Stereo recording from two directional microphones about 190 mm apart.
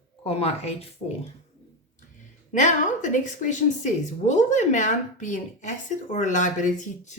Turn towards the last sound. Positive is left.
turn(degrees=40)  # may be behind; listen again after turning